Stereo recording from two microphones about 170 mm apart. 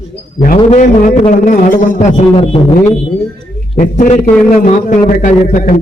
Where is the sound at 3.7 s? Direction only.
45° left (ahead or behind).